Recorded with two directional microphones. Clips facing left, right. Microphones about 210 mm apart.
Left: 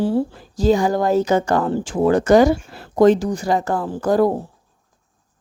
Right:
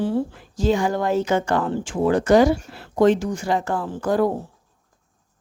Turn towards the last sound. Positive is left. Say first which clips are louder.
# left 4 dB
turn(degrees=40)  # may be behind; listen again after turning